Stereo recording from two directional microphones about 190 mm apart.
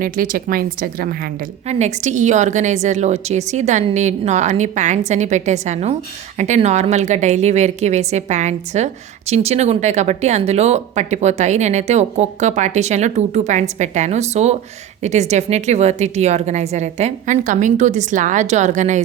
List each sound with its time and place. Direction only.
0.0 s a woman's voice: 50° right (ahead or behind)
1.6 s a woman's voice: 40° right (ahead or behind)